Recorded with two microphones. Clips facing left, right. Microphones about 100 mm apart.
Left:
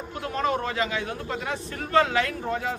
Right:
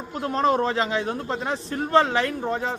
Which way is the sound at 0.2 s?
35° right (ahead or behind).